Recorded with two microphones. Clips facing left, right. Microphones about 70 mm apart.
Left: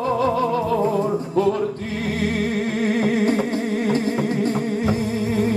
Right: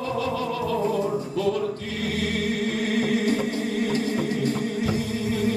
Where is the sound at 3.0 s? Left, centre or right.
Left.